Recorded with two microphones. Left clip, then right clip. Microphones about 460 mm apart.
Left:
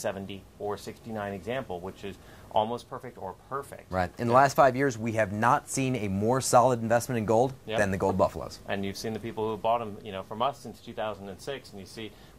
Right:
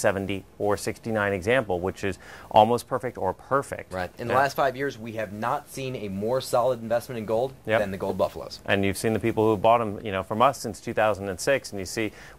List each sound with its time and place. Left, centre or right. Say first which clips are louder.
0.0 s speech: right 9 dB; right
3.9 s speech: left 2 dB; centre
8.6 s speech: right 10 dB; right